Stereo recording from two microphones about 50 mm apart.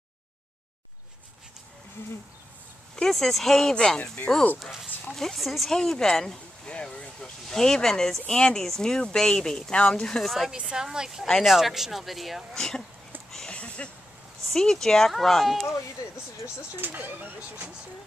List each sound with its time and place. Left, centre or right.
3.0 s speech: centre
4.6 s speech: centre
5.8 s speech: centre
7.2 s speech: centre
10.2 s speech: centre
10.5 s a woman's voice: centre
12.5 s speech: centre
13.5 s a sound: left
14.4 s speech: centre
16.7 s speech: right